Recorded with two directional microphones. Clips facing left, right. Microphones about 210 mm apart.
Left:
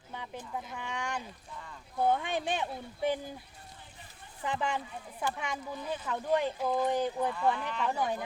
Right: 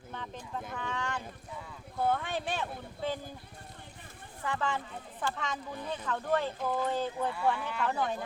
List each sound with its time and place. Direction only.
0.1 s a sound: 10° left (ahead or behind)
0.7 s speech: 15° left (ahead or behind)
4.4 s speech: 15° left (ahead or behind)